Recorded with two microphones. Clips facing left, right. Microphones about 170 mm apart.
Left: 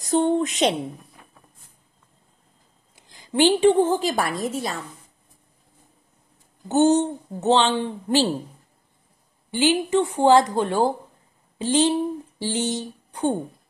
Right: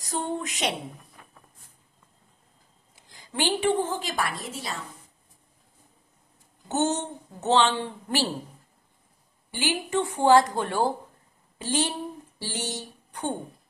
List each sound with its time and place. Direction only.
0.0 s a woman's voice: 25° left (ahead or behind)
3.3 s a woman's voice: 20° left (ahead or behind)
3.8 s a woman's voice: 35° left (ahead or behind)
6.7 s a woman's voice: 15° left (ahead or behind)
9.5 s a woman's voice: 20° left (ahead or behind)